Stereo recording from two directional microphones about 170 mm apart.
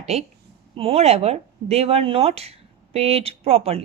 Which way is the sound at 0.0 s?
40° right (ahead or behind).